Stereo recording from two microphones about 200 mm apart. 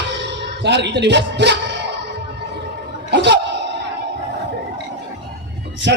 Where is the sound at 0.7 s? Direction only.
60° right (ahead or behind).